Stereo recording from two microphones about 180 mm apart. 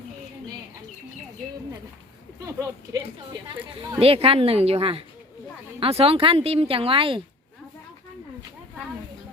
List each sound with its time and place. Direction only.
2.5 s speech: 15° right (ahead or behind)
4.0 s speech: 30° right (ahead or behind)